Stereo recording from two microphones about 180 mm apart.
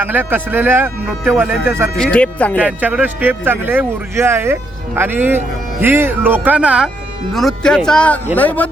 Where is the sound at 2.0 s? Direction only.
5° left (ahead or behind).